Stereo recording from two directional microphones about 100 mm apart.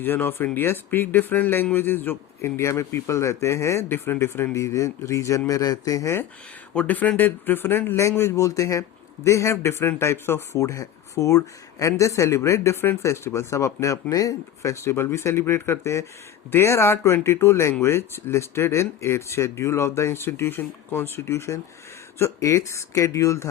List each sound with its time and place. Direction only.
0.0 s a man's voice: 20° left (ahead or behind)
6.7 s a man's voice: 15° left (ahead or behind); by 23.5 s 30° left (ahead or behind)